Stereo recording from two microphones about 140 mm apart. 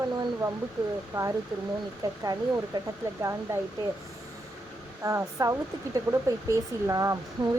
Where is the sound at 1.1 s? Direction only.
30° right (ahead or behind).